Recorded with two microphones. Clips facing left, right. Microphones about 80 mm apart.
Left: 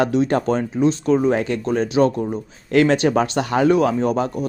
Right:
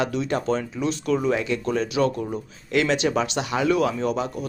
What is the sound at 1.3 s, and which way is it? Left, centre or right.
Speech, left.